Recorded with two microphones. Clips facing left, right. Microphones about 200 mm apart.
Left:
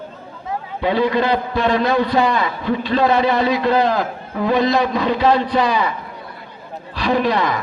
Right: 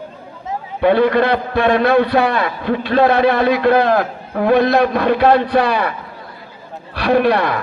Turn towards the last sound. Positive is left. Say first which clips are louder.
# right 4 dB
turn(degrees=-60)  # may be behind; listen again after turning